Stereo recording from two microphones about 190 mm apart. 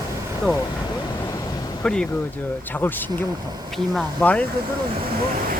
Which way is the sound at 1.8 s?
5° left (ahead or behind).